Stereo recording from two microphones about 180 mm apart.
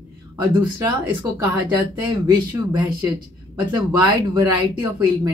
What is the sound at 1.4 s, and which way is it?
Speech, 20° right (ahead or behind).